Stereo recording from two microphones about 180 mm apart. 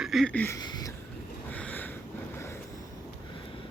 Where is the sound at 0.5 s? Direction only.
20° left (ahead or behind).